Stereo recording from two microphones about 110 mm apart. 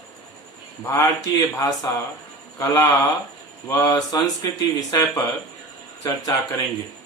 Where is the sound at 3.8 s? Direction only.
40° left (ahead or behind).